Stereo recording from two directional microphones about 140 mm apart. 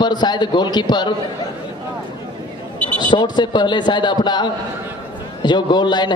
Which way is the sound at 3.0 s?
30° left (ahead or behind).